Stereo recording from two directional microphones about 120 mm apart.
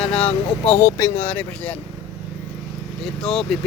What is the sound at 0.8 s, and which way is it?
Speech, 25° left (ahead or behind).